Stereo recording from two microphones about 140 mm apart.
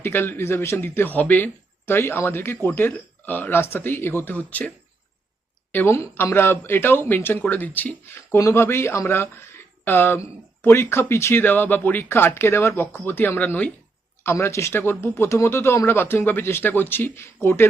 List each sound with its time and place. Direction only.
0.0 s speech: 15° left (ahead or behind)
5.7 s speech: 15° left (ahead or behind)